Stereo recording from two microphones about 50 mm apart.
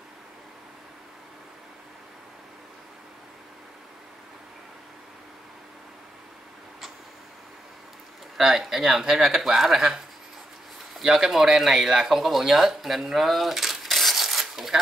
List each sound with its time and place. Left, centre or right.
8.4 s speech: centre
11.0 s speech: centre